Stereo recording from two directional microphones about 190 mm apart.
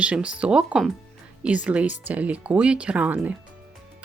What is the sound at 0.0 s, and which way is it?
Speech, 5° right (ahead or behind).